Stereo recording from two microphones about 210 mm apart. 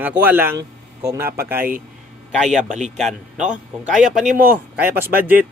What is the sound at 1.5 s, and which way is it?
Speech, 45° right (ahead or behind).